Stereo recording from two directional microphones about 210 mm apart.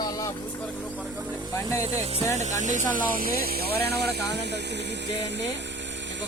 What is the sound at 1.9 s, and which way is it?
Speech, 30° right (ahead or behind).